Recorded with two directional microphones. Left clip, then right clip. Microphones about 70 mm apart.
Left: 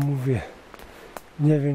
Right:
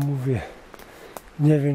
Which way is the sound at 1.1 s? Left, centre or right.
Centre.